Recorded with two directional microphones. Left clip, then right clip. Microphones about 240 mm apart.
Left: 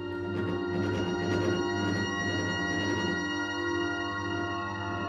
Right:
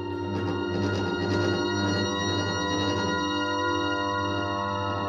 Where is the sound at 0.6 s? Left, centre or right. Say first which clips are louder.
Right 3 dB; right.